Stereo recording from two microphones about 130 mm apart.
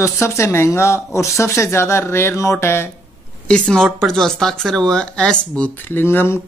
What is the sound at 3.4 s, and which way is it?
Speech, 5° left (ahead or behind).